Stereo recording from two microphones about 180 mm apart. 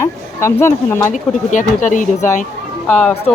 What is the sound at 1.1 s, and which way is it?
Speech, 45° left (ahead or behind).